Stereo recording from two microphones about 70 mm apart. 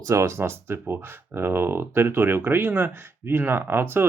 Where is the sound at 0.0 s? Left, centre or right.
Right.